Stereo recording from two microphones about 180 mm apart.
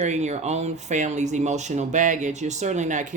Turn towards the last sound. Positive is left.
turn(degrees=-40)  # may be behind; listen again after turning